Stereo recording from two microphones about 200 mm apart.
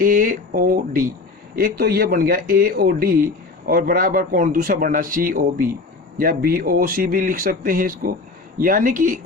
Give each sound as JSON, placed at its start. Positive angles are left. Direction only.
{"t": 0.0, "sound": "a man's voice", "side_deg": -45}